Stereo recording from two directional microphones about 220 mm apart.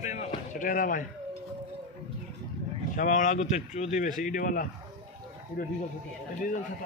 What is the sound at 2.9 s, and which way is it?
A man's voice, 35° left (ahead or behind).